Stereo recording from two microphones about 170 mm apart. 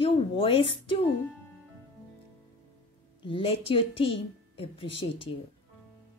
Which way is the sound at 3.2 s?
30° left (ahead or behind).